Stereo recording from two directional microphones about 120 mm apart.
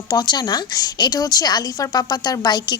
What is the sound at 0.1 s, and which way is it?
A woman's voice, 35° left (ahead or behind).